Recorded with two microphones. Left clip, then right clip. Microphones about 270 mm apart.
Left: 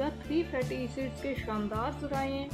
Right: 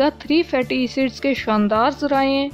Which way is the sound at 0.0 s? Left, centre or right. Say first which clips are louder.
Right 14 dB; right.